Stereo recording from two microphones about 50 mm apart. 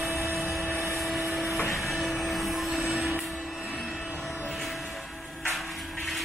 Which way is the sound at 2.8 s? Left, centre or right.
Right.